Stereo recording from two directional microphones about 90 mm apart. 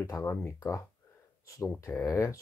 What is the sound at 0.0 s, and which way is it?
Speech, 35° left (ahead or behind).